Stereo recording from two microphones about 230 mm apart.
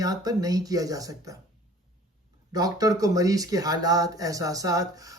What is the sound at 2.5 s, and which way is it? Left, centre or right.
Speech, centre.